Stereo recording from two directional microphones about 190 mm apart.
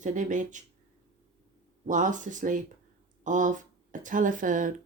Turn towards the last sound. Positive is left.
turn(degrees=-45)  # may be behind; listen again after turning